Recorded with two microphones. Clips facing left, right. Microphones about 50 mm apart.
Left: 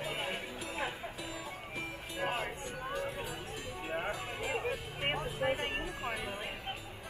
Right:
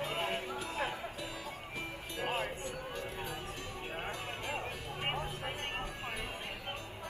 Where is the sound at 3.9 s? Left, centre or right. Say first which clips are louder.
Left 5 dB; centre.